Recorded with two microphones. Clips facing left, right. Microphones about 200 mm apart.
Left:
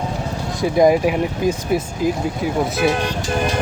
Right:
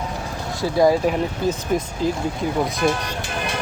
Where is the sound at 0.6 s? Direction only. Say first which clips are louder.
Left 3 dB; 15° left (ahead or behind).